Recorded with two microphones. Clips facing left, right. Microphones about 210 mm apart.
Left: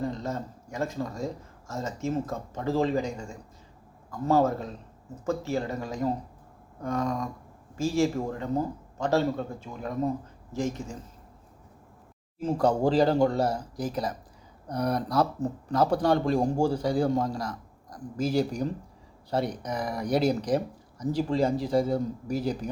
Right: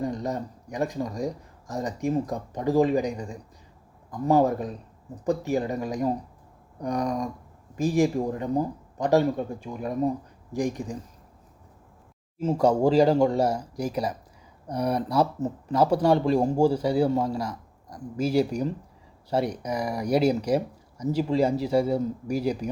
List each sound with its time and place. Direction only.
0.0 s speech: 15° right (ahead or behind)
12.4 s speech: 10° right (ahead or behind)